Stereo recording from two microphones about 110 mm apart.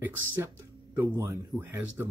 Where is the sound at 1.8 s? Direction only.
15° right (ahead or behind).